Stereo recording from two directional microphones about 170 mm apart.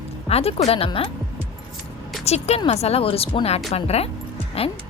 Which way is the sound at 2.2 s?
40° left (ahead or behind).